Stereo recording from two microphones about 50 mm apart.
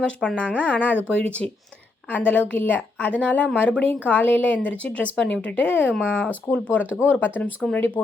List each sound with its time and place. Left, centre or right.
0.0 s speech: left